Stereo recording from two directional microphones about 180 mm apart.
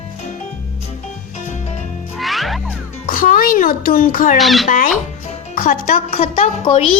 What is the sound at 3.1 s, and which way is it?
A child's voice, 50° left (ahead or behind).